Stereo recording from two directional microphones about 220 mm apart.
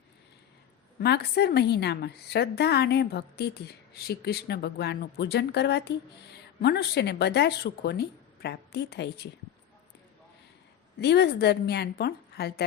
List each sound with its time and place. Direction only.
0.9 s speech: 45° left (ahead or behind)
11.0 s speech: 50° left (ahead or behind)